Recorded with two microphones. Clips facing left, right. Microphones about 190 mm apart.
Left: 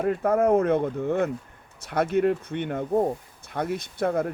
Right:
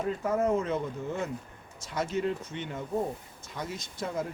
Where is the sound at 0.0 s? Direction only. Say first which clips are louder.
Left 6 dB; 60° left (ahead or behind).